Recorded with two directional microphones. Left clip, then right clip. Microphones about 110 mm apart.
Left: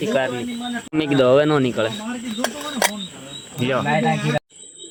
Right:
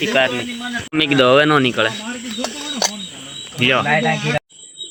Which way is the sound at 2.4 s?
15° left (ahead or behind).